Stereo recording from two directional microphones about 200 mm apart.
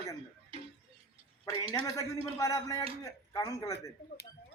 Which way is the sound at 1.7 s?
15° left (ahead or behind).